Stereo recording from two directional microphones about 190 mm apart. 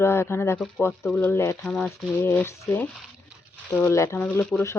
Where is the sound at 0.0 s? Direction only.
15° left (ahead or behind).